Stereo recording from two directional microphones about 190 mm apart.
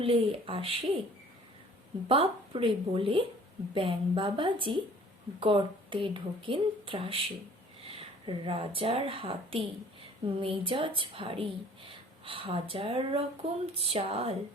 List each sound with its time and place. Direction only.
0.0 s a woman's voice: 30° right (ahead or behind)
2.0 s a woman's voice: 30° right (ahead or behind)